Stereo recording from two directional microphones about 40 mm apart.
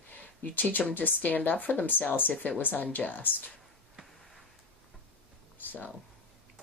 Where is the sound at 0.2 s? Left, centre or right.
Left.